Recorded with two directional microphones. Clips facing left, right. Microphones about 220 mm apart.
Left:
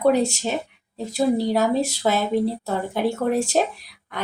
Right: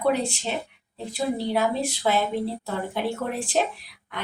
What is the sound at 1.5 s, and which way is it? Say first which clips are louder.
Speech: left 4 dB; 40° left (ahead or behind).